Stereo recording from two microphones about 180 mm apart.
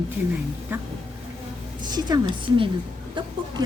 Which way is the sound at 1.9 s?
25° right (ahead or behind).